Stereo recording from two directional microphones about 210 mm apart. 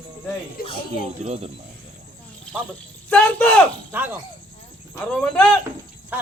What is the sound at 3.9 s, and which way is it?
Speech, 10° right (ahead or behind).